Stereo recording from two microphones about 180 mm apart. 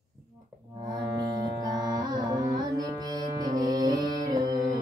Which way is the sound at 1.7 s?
25° right (ahead or behind).